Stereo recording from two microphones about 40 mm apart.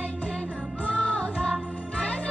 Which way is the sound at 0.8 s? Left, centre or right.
Left.